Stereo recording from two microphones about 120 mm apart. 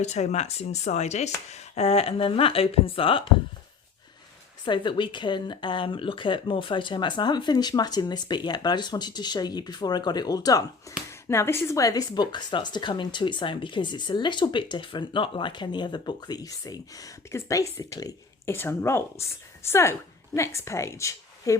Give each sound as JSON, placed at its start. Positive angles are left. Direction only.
{"t": 0.0, "sound": "speech", "side_deg": 70}
{"t": 4.6, "sound": "a woman's voice", "side_deg": 45}